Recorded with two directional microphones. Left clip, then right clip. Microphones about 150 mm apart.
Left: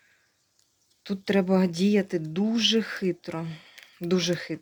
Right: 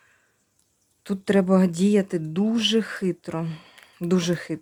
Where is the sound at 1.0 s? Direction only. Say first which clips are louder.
Right 4 dB; 25° right (ahead or behind).